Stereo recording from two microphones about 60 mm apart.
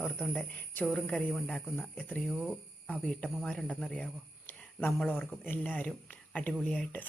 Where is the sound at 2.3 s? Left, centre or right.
Centre.